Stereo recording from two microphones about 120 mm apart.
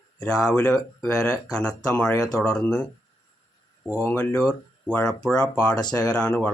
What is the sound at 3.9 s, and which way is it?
Speech, 10° left (ahead or behind).